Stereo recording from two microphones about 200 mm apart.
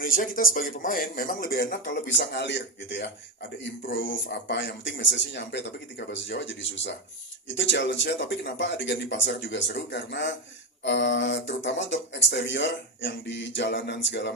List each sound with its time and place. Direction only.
0.0 s speech: 45° left (ahead or behind); by 14.3 s 60° left (ahead or behind)